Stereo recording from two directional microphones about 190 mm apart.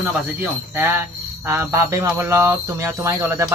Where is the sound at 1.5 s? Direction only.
15° right (ahead or behind).